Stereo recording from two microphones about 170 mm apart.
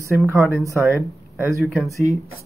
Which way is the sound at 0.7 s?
15° right (ahead or behind).